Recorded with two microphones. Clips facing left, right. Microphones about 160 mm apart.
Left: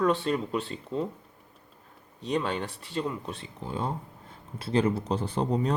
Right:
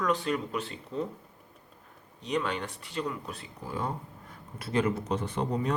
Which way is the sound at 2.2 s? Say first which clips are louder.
Left 2 dB; 35° left (ahead or behind).